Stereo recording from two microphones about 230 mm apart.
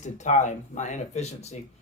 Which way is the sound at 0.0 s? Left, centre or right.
Left.